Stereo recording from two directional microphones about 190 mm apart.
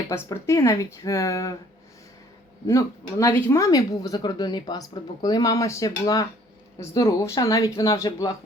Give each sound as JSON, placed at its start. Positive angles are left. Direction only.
{"t": 0.1, "sound": "speech", "side_deg": 15}
{"t": 2.6, "sound": "speech", "side_deg": 15}